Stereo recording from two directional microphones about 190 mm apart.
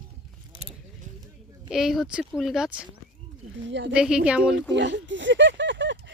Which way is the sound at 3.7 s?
70° right (ahead or behind).